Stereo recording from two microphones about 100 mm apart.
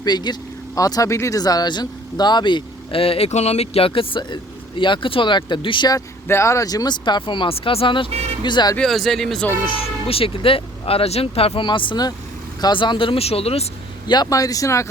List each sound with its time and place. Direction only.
0.0 s speech: 45° left (ahead or behind)
6.2 s speech: 25° left (ahead or behind); by 7.5 s 50° left (ahead or behind)
7.5 s speech: 70° left (ahead or behind)
8.4 s speech: 50° left (ahead or behind)
8.9 s speech: centre (ahead or behind)
9.8 s speech: 70° left (ahead or behind)
11.6 s speech: 55° left (ahead or behind); by 13.7 s 80° left
14.1 s speech: 40° left (ahead or behind)